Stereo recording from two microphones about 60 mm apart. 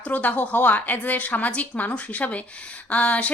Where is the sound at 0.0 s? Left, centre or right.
Left.